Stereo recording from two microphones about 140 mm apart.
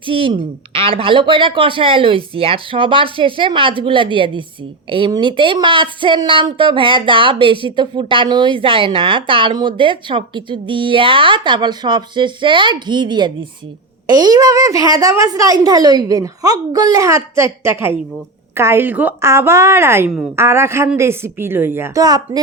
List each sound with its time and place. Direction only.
0.0 s a woman's voice: 40° right (ahead or behind); by 20.1 s 15° right (ahead or behind)
20.1 s a woman's voice: 5° right (ahead or behind)
20.3 s a woman's voice: 20° right (ahead or behind)